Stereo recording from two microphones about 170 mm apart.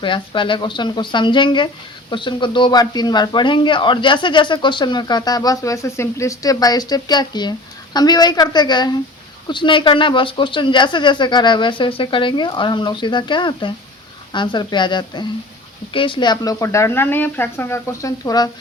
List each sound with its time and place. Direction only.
0.0 s speech: 30° left (ahead or behind)